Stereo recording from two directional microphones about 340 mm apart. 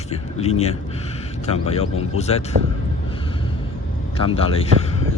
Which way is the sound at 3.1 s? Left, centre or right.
Centre.